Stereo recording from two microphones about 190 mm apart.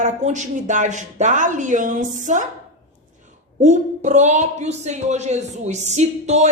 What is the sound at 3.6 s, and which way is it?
Speech, 40° right (ahead or behind).